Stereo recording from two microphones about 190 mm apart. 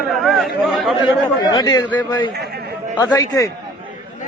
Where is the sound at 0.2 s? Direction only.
Centre (ahead or behind).